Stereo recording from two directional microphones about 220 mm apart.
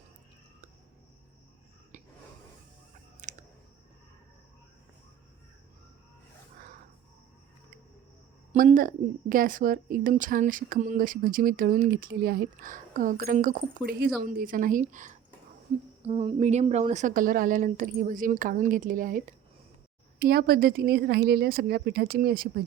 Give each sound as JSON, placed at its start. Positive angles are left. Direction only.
{"t": 3.2, "sound": "clicking", "side_deg": -35}
{"t": 8.5, "sound": "a woman's voice", "side_deg": -40}